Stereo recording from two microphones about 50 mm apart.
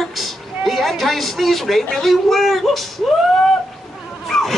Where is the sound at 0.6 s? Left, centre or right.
Centre.